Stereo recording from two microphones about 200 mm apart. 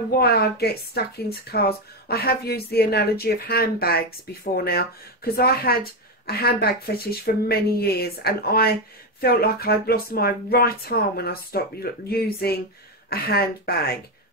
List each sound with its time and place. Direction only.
0.2 s speech: 50° left (ahead or behind)